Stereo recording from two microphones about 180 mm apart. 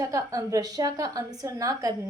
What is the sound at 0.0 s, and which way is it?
A woman's voice, 20° right (ahead or behind).